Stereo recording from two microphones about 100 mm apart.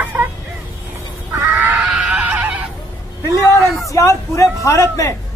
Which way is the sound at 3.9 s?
30° left (ahead or behind).